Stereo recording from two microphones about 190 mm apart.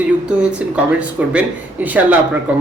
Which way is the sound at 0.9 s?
5° right (ahead or behind).